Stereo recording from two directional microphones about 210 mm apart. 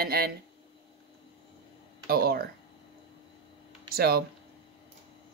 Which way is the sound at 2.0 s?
45° right (ahead or behind).